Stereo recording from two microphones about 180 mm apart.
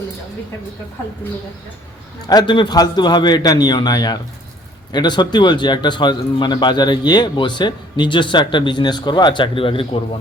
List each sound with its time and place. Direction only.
2.2 s speech: 20° left (ahead or behind)